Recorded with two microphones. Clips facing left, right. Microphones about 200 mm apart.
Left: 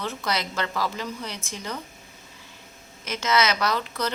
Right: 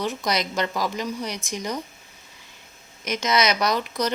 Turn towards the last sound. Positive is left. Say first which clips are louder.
# right 3 dB
turn(degrees=-15)  # may be behind; listen again after turning